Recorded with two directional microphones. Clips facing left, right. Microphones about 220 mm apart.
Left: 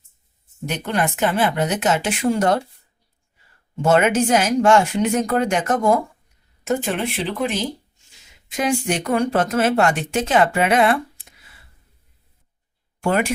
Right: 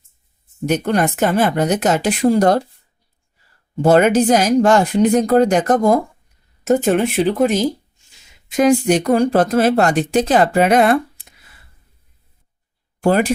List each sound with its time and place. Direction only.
0.7 s speech: 40° right (ahead or behind)
3.8 s speech: 35° right (ahead or behind)
13.0 s speech: 35° right (ahead or behind)